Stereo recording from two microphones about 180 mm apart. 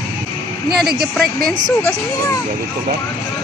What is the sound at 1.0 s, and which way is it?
Speech, centre (ahead or behind).